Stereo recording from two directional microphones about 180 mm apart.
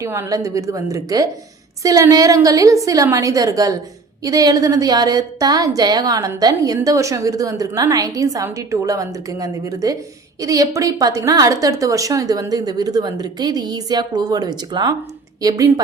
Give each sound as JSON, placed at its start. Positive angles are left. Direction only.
{"t": 0.0, "sound": "a woman's voice", "side_deg": -15}